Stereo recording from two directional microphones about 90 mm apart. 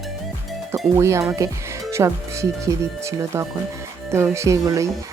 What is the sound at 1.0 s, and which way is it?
Speech, 35° right (ahead or behind).